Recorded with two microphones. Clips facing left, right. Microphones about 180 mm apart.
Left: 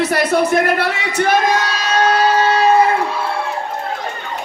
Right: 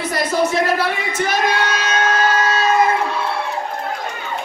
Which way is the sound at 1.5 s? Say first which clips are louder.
Left 2 dB; 40° left (ahead or behind).